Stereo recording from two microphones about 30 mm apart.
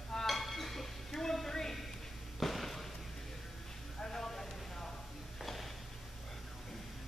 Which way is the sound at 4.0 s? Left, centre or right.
Centre.